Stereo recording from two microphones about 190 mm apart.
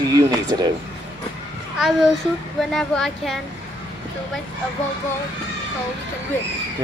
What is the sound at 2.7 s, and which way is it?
Speech, centre (ahead or behind).